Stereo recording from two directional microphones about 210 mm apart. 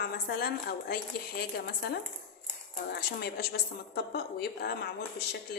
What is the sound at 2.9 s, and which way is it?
A woman's voice, 50° left (ahead or behind).